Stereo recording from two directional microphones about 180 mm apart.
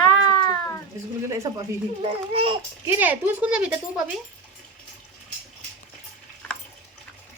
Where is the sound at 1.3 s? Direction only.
15° right (ahead or behind).